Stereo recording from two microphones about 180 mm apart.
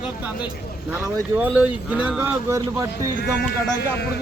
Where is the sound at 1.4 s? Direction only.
10° right (ahead or behind).